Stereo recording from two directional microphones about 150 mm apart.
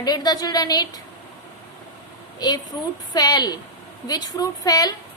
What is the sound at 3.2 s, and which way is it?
A woman's voice, 25° left (ahead or behind).